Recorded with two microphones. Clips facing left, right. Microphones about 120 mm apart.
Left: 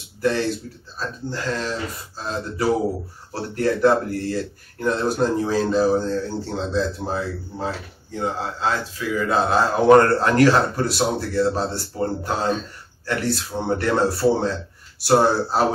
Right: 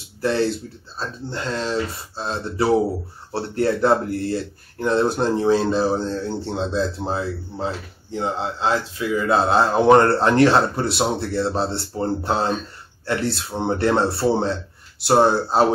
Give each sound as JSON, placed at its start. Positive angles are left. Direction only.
{"t": 0.2, "sound": "speech", "side_deg": -30}